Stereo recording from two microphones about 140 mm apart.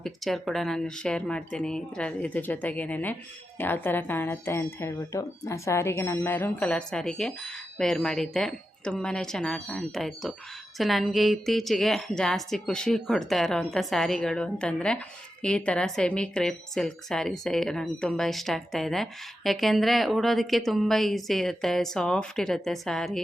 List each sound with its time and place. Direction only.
0.0 s a woman's voice: centre (ahead or behind)